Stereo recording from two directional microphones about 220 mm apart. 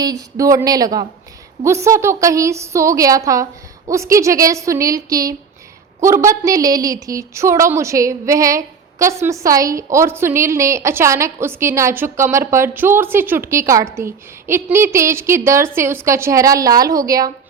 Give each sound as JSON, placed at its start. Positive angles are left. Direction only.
{"t": 0.0, "sound": "a woman's voice", "side_deg": -15}